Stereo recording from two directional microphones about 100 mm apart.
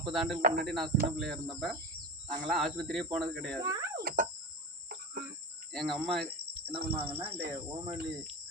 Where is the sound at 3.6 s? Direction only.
35° right (ahead or behind).